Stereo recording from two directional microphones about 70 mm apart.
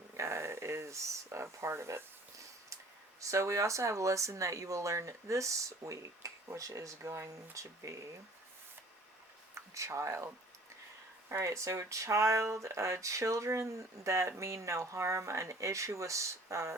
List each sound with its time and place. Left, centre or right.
0.2 s a sound: right
3.2 s speech: right
9.7 s speech: right